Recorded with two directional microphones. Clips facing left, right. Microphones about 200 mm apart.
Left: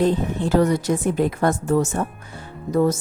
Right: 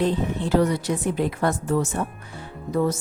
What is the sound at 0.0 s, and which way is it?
A woman's voice, 45° left (ahead or behind).